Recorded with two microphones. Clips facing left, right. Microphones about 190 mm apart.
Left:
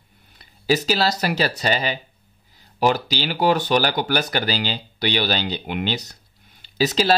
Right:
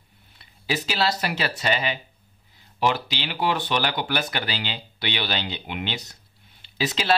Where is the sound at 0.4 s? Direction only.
40° left (ahead or behind).